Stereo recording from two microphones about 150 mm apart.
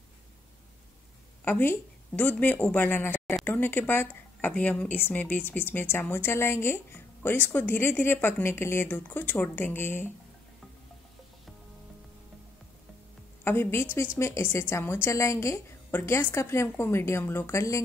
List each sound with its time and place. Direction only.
1.4 s speech: 15° left (ahead or behind)
13.4 s speech: 15° left (ahead or behind)